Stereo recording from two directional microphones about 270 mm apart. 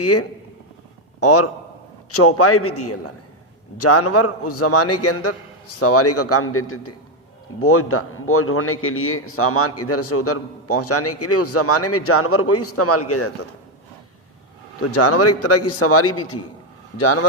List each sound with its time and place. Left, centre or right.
0.0 s a man's voice: left
14.8 s a man's voice: left